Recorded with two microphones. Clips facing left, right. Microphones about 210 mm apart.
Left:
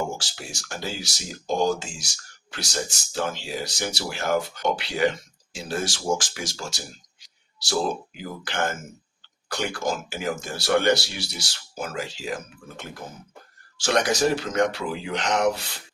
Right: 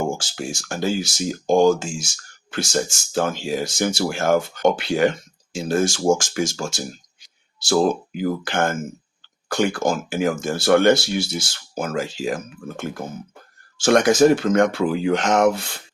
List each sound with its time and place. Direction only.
0.2 s speech: 50° right (ahead or behind)